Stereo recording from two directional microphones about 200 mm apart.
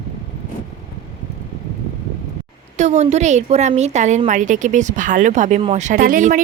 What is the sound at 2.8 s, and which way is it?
Speech, 35° right (ahead or behind).